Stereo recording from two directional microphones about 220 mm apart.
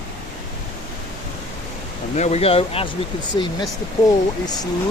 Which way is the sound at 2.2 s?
30° left (ahead or behind).